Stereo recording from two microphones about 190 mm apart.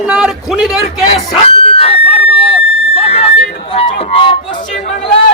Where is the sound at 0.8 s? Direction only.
35° left (ahead or behind).